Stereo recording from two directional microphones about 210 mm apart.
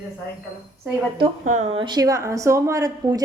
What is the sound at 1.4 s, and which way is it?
A woman's voice, 35° right (ahead or behind).